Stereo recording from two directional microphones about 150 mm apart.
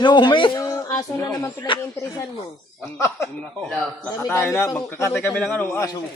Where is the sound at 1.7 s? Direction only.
35° left (ahead or behind).